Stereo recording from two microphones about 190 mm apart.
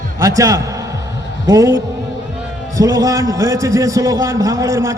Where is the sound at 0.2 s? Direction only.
15° right (ahead or behind).